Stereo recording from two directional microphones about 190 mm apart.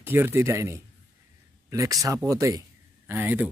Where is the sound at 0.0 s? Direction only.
10° right (ahead or behind).